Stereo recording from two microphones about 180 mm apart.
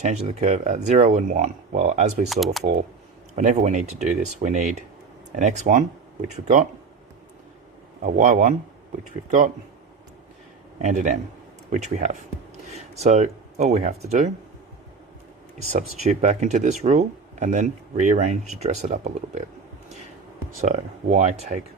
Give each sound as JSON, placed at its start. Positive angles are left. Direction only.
{"t": 0.0, "sound": "speech", "side_deg": -35}
{"t": 2.3, "sound": "speech", "side_deg": 0}
{"t": 3.3, "sound": "speech", "side_deg": -40}
{"t": 8.0, "sound": "speech", "side_deg": -45}
{"t": 10.8, "sound": "speech", "side_deg": -40}
{"t": 15.7, "sound": "speech", "side_deg": -40}
{"t": 20.7, "sound": "speech", "side_deg": -40}